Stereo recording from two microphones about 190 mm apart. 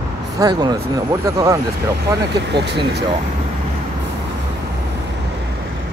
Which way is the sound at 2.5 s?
65° right (ahead or behind).